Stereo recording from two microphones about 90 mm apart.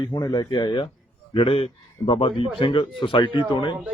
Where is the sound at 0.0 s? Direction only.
55° left (ahead or behind).